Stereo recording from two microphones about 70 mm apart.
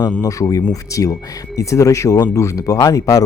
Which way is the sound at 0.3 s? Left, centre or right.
Left.